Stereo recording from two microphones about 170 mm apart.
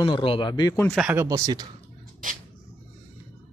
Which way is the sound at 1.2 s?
25° right (ahead or behind).